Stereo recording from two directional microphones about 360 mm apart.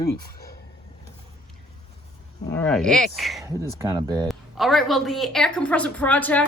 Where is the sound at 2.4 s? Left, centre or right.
Centre.